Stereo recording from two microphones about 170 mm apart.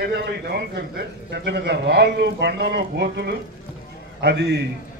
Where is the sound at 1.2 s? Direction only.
90° right.